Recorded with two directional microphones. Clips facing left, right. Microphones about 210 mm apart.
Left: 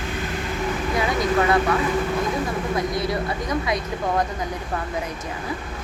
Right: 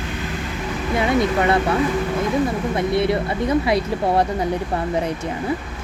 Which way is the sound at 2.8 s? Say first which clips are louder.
Right 7 dB; 25° right (ahead or behind).